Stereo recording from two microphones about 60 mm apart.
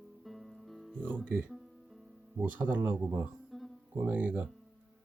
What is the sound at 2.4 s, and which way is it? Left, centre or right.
Speech, right.